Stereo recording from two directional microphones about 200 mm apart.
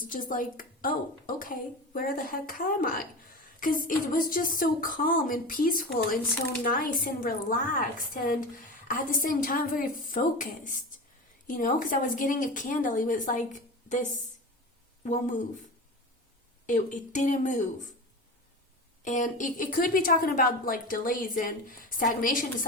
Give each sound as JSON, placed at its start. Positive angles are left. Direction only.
{"t": 0.0, "sound": "a woman's voice", "side_deg": 45}
{"t": 16.6, "sound": "a woman's voice", "side_deg": 40}
{"t": 19.0, "sound": "a woman's voice", "side_deg": 40}